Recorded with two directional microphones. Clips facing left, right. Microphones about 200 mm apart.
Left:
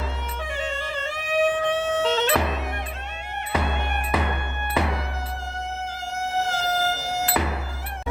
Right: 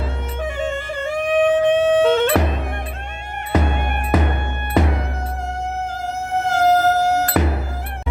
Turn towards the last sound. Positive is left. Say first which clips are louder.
# right 10 dB
turn(degrees=-60)  # may be behind; listen again after turning